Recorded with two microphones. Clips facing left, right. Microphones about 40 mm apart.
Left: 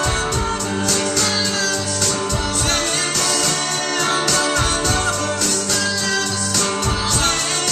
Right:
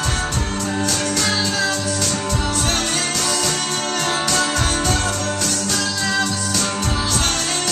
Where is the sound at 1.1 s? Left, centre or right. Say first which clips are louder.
Even; centre.